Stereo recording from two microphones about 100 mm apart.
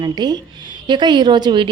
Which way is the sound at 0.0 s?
45° right (ahead or behind).